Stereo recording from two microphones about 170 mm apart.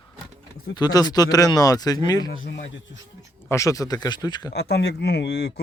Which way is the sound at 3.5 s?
20° left (ahead or behind).